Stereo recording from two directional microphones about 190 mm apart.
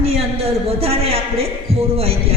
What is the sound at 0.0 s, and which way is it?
A man's voice, 30° right (ahead or behind).